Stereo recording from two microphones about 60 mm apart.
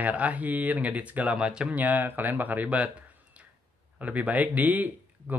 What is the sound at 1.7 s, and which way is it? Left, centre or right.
Speech, right.